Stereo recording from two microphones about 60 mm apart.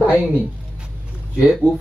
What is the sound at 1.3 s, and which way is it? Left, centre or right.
Speech, centre.